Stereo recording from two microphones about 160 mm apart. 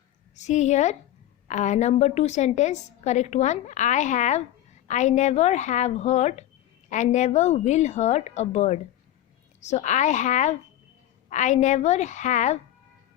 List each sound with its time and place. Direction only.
0.3 s a woman's voice: 45° left (ahead or behind)